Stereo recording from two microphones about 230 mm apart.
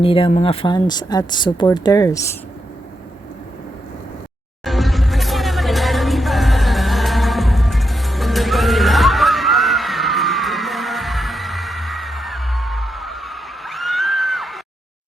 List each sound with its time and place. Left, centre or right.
0.0 s speech: left
4.6 s music: centre